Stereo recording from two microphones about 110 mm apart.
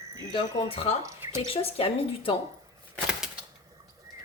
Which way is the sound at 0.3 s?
55° left (ahead or behind).